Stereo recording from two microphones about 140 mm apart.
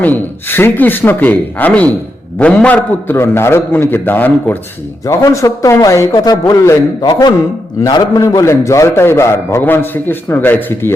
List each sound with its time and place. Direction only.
0.0 s a man's voice: 15° left (ahead or behind)